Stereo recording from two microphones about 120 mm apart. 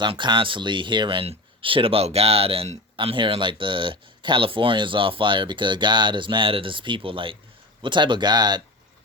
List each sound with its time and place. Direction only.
0.0 s speech: 40° right (ahead or behind)